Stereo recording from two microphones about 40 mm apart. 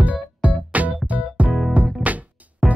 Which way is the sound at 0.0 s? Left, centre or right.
Right.